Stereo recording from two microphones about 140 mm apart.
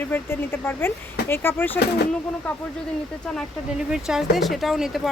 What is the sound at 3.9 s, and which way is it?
Speech, 5° right (ahead or behind).